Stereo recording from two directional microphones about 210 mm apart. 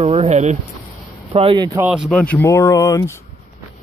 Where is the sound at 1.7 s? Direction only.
5° right (ahead or behind); by 3.1 s 15° left (ahead or behind).